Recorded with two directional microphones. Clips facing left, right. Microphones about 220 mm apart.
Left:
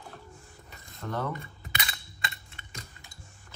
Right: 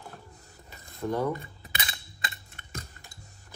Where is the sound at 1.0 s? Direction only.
15° right (ahead or behind).